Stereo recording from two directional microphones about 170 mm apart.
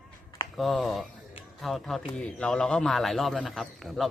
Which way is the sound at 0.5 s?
Centre (ahead or behind).